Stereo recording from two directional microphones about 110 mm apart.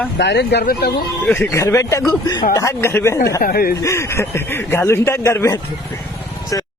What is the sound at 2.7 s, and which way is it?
A man's voice, 20° left (ahead or behind).